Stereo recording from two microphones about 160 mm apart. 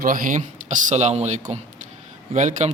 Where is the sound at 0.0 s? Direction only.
60° right (ahead or behind).